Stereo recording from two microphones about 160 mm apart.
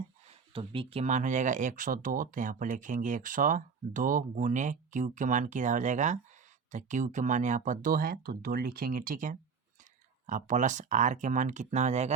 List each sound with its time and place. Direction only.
0.5 s speech: 35° right (ahead or behind)